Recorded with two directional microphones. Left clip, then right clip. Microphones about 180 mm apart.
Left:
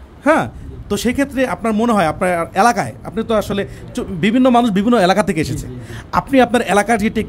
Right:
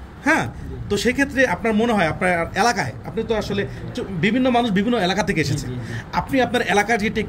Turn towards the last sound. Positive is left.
turn(degrees=35)  # may be behind; listen again after turning